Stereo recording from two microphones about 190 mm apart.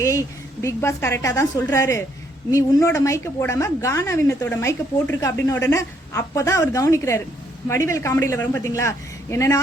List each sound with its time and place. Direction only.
0.0 s a woman's voice: 15° left (ahead or behind)